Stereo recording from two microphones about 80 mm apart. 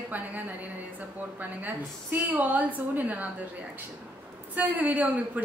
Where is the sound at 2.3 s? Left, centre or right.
Right.